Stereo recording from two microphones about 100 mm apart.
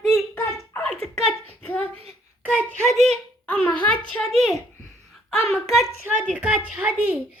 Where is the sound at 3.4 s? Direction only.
15° left (ahead or behind).